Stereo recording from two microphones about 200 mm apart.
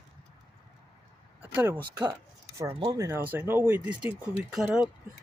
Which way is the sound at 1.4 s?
5° right (ahead or behind).